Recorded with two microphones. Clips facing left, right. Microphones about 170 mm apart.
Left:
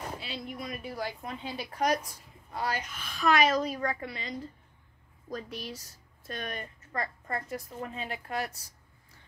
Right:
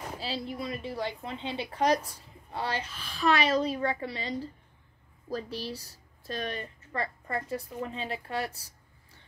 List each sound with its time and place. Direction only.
0.2 s a woman's voice: 35° right (ahead or behind)